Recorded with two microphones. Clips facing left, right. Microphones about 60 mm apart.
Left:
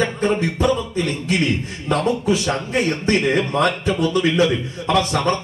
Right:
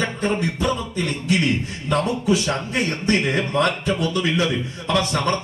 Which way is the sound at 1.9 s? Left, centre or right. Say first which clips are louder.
Left 2 dB; left.